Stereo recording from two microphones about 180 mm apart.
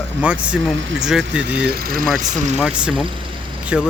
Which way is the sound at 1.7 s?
55° right (ahead or behind).